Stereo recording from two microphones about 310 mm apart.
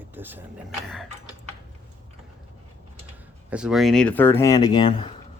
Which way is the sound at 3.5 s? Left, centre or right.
Centre.